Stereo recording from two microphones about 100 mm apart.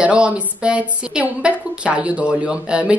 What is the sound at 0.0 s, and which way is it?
A woman's voice, 10° right (ahead or behind).